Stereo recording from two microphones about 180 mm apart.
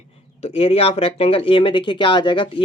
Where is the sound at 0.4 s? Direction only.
35° left (ahead or behind).